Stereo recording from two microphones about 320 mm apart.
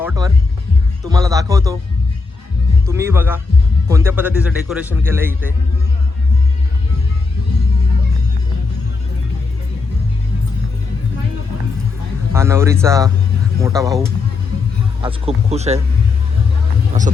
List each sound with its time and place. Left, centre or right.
0.0 s music: centre
1.0 s speech: centre
2.8 s a man's voice: centre
12.3 s speech: centre
15.0 s speech: centre